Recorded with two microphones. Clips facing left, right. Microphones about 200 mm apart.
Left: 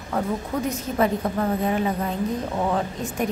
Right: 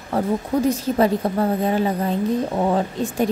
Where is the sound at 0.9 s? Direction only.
35° right (ahead or behind).